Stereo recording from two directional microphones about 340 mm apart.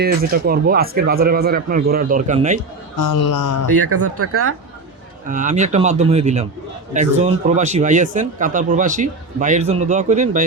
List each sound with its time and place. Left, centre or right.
0.0 s speech: right
2.9 s speech: left
3.7 s speech: right
5.3 s speech: right